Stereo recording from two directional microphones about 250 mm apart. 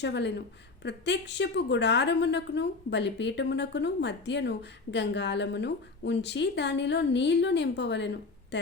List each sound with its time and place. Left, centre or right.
0.0 s a woman's voice: left